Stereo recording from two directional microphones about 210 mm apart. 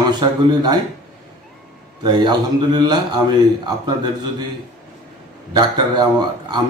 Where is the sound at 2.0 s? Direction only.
20° right (ahead or behind).